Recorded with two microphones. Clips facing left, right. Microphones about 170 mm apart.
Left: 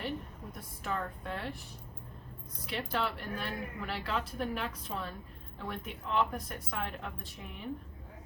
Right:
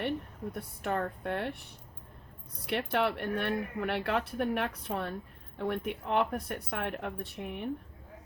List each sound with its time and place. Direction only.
0.5 s speech: 60° right (ahead or behind)
2.6 s speech: 65° right (ahead or behind)